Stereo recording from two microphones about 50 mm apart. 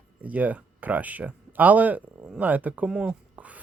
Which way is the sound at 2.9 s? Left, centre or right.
Centre.